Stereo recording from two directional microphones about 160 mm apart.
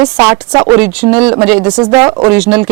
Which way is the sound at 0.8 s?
5° right (ahead or behind).